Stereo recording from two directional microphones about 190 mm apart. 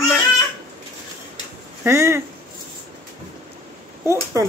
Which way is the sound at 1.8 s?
15° right (ahead or behind).